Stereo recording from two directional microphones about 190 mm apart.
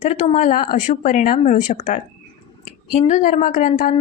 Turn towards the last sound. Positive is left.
turn(degrees=40)  # may be behind; listen again after turning